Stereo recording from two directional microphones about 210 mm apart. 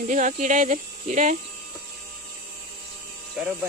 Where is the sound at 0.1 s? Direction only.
35° right (ahead or behind).